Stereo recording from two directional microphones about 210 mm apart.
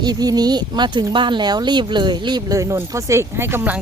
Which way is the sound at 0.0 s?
20° right (ahead or behind).